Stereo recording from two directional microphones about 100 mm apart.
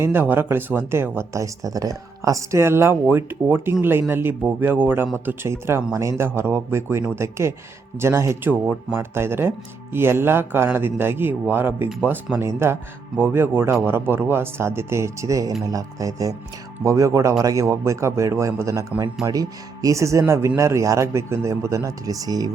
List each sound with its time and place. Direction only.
0.0 s speech: 20° right (ahead or behind); by 22.4 s 40° right (ahead or behind)